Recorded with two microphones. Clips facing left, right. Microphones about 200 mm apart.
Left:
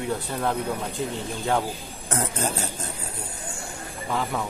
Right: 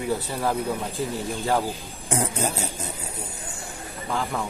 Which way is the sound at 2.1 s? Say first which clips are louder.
Right 1 dB; 10° right (ahead or behind).